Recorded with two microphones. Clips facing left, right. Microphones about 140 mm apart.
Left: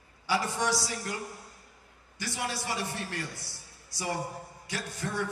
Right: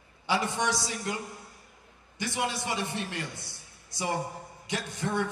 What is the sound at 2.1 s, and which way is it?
A man's voice, 20° right (ahead or behind).